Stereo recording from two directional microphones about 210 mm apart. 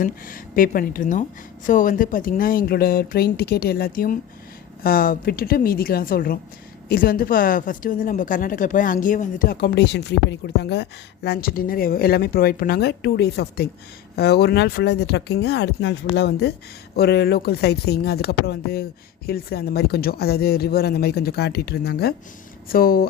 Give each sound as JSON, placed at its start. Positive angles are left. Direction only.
{"t": 0.0, "sound": "a woman's voice", "side_deg": 40}